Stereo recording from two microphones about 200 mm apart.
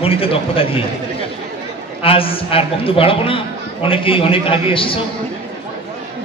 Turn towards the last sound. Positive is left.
turn(degrees=25)  # may be behind; listen again after turning